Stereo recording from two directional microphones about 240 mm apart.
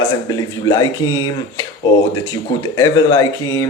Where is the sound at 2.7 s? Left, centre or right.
Centre.